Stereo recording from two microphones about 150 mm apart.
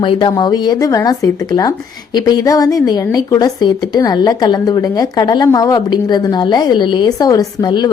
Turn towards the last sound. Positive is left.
turn(degrees=30)  # may be behind; listen again after turning